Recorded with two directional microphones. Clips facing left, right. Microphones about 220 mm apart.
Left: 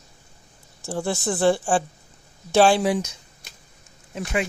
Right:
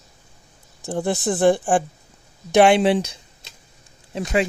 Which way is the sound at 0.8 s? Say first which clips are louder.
Right 3 dB; 20° right (ahead or behind).